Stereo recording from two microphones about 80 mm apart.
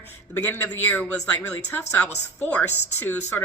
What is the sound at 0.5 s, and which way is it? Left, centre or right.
Speech, left.